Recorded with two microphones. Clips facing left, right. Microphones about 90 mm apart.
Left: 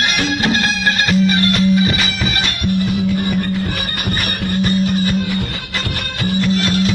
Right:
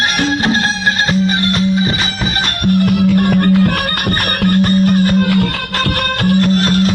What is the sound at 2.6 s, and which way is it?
Music, 65° right (ahead or behind).